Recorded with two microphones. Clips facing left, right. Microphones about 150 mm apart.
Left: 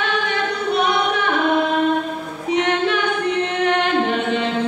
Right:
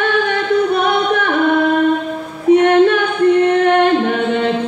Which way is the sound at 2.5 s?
50° right (ahead or behind).